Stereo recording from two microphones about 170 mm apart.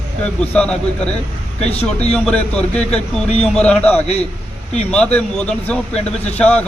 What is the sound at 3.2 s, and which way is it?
Speech, 35° left (ahead or behind).